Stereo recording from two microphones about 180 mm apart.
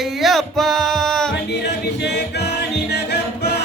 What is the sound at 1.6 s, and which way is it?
Music, 70° left (ahead or behind).